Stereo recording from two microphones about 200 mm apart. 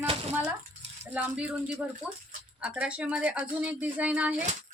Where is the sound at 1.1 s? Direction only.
5° right (ahead or behind).